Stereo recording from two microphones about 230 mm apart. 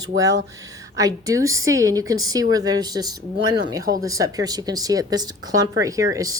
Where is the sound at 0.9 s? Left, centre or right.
Centre.